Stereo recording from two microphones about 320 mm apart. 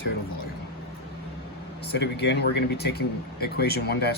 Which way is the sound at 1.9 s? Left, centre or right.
Left.